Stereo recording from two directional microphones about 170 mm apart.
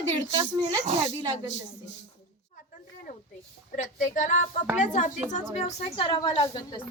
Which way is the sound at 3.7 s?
45° left (ahead or behind).